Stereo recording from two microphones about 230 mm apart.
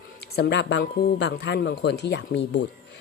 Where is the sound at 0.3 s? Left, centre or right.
Left.